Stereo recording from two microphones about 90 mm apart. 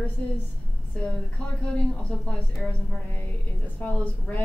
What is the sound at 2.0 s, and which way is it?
Speech, 10° left (ahead or behind).